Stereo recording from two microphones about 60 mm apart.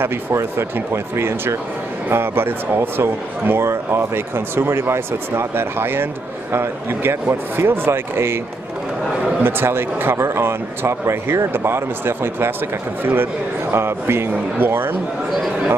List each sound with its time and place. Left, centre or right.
0.0 s speech: right
9.4 s a man's voice: right